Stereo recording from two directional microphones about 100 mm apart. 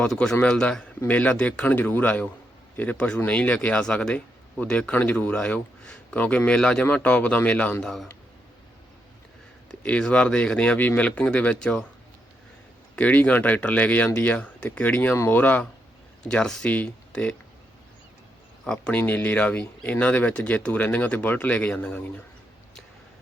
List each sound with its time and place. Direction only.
0.0 s speech: 5° left (ahead or behind)
9.8 s speech: 15° left (ahead or behind)
13.0 s speech: 15° left (ahead or behind)
18.6 s speech: 10° left (ahead or behind)